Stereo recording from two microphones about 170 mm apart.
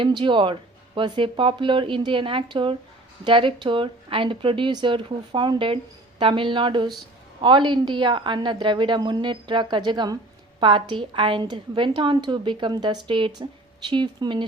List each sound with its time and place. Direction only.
0.0 s speech: 30° right (ahead or behind)